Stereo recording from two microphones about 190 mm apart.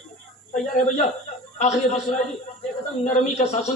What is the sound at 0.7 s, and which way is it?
A man's voice, 40° left (ahead or behind).